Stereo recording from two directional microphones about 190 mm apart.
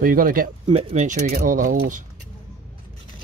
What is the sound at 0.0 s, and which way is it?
Speech, 50° right (ahead or behind).